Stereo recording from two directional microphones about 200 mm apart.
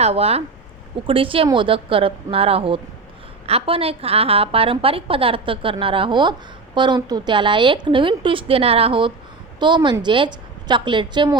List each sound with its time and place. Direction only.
0.0 s a woman's voice: 30° right (ahead or behind)